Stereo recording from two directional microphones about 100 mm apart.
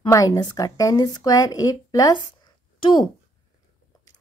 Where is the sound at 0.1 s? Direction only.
30° left (ahead or behind).